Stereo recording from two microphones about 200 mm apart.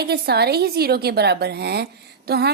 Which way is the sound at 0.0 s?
55° right (ahead or behind).